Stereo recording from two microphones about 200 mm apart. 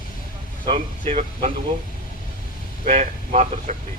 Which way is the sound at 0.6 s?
30° right (ahead or behind).